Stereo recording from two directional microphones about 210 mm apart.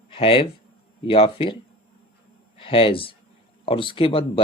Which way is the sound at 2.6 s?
25° left (ahead or behind).